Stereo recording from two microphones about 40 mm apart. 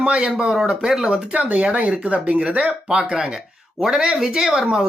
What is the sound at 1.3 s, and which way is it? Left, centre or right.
Speech, right.